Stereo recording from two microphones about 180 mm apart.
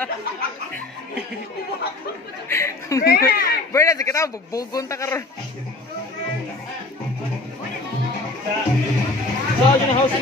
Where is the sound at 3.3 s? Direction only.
55° left (ahead or behind).